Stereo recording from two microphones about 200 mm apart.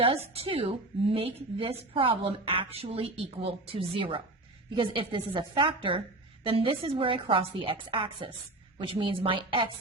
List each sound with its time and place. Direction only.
0.0 s a woman's voice: 30° right (ahead or behind)